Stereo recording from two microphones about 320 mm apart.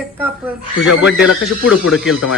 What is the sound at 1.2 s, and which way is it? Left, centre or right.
Speech, left.